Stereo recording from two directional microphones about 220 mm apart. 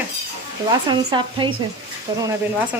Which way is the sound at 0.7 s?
15° right (ahead or behind).